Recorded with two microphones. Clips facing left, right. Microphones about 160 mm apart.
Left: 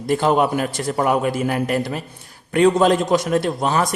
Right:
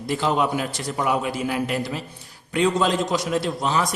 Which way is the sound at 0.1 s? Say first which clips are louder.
Left 5 dB; 50° left (ahead or behind).